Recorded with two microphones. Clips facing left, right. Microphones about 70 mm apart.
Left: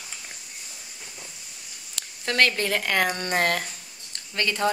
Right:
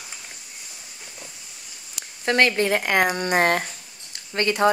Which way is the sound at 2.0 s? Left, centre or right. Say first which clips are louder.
Right 3 dB; right.